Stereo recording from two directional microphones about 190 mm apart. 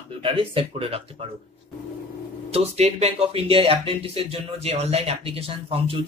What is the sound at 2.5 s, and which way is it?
Speech, 35° right (ahead or behind).